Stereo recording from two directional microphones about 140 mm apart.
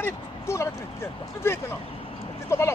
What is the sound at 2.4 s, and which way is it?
Speech, 20° left (ahead or behind).